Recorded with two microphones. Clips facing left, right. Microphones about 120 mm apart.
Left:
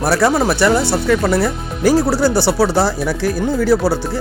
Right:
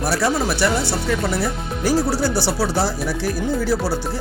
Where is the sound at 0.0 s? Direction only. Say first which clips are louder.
Left 6 dB; 70° left (ahead or behind).